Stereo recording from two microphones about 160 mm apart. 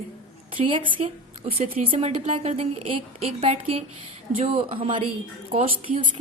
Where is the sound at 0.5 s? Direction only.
30° right (ahead or behind).